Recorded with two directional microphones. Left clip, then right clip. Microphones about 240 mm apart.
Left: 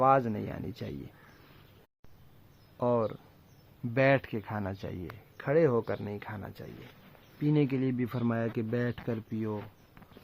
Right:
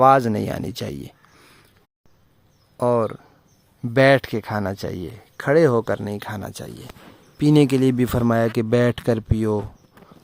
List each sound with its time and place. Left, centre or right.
0.0 s speech: right
2.7 s speech: right